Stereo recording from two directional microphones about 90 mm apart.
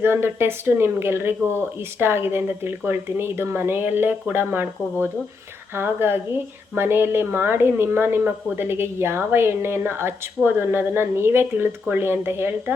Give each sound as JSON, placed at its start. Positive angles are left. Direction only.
{"t": 0.0, "sound": "a woman's voice", "side_deg": -25}